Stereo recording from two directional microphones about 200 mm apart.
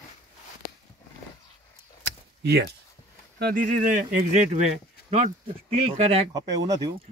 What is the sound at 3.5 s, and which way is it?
Speech, 45° right (ahead or behind).